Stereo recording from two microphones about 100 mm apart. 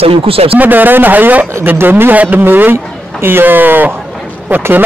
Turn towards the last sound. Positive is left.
turn(degrees=-15)  # may be behind; listen again after turning